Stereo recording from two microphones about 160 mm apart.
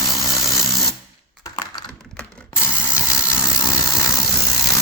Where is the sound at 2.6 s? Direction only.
15° left (ahead or behind).